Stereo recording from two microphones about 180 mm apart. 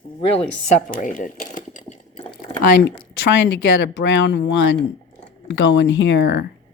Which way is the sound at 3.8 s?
80° left.